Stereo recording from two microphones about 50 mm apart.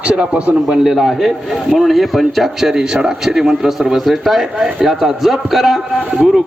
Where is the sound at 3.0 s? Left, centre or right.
Centre.